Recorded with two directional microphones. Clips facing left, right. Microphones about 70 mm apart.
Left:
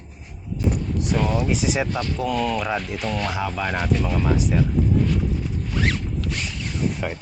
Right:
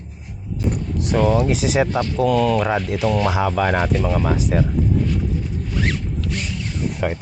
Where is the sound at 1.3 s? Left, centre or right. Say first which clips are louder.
Right 4 dB; right.